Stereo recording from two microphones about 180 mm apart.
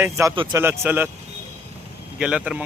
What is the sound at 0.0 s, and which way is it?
Speech, 15° right (ahead or behind).